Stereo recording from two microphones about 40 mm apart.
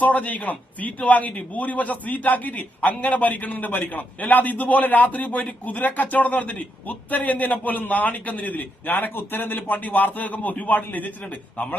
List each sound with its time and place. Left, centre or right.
0.0 s a man's voice: left
9.1 s a man's voice: left